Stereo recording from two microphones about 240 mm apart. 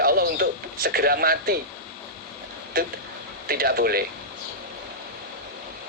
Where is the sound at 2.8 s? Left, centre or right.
Right.